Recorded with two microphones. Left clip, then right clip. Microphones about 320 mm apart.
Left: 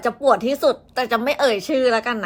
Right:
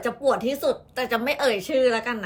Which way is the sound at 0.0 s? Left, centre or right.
Centre.